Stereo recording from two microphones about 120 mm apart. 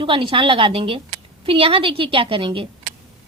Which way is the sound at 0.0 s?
45° right (ahead or behind).